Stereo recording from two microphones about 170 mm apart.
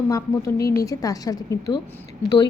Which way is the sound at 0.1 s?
20° left (ahead or behind).